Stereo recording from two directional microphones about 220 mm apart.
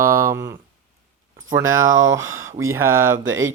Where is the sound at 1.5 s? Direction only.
65° right (ahead or behind).